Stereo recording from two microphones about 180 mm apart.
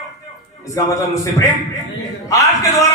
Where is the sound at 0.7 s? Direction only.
15° left (ahead or behind).